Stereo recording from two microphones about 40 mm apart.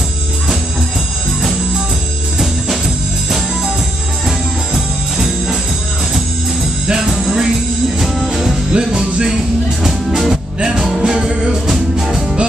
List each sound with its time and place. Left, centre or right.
3.3 s music: centre
4.7 s music: centre
6.9 s music: centre
8.7 s music: centre
9.8 s music: centre